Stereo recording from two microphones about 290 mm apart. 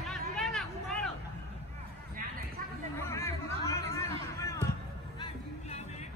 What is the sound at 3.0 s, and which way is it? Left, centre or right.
Chatter, centre.